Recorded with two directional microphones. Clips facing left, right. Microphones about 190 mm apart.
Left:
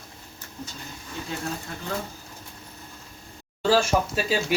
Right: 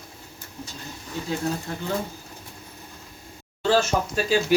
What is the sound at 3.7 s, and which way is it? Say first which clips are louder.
Speech: even; 5° left (ahead or behind).